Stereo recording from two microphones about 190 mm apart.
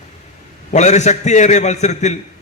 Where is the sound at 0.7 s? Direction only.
40° left (ahead or behind).